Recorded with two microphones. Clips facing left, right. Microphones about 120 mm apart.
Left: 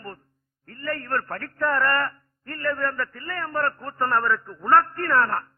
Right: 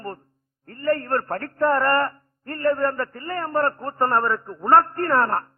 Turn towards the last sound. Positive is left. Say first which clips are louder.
# right 2 dB
turn(degrees=-30)  # may be behind; listen again after turning